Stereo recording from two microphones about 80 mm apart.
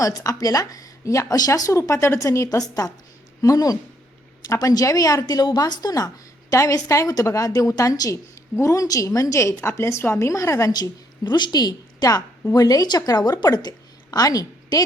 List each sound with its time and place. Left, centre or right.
0.0 s a woman's voice: left
6.5 s a woman's voice: left
8.1 s a woman's voice: left
11.3 s a woman's voice: left